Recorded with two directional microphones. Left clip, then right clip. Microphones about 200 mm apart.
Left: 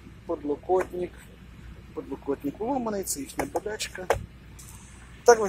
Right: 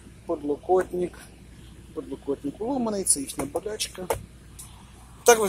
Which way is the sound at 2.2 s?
5° right (ahead or behind).